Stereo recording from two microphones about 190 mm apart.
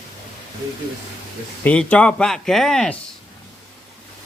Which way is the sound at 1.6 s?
5° left (ahead or behind).